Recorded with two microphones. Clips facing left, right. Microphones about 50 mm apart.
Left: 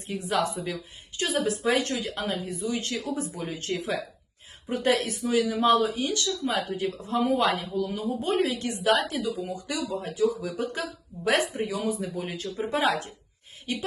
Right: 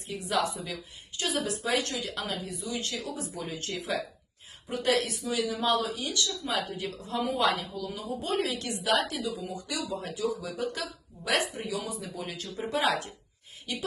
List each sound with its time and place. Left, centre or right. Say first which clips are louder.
0.1 s speech: left 2 dB; left